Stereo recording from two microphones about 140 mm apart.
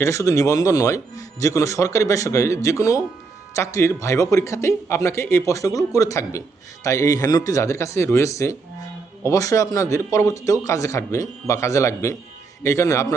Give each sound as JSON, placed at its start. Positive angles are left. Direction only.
{"t": 0.0, "sound": "speech", "side_deg": 20}